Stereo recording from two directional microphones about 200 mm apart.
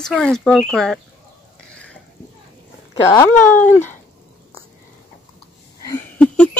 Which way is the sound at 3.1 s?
15° left (ahead or behind).